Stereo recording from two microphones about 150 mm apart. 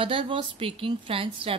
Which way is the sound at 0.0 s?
35° right (ahead or behind).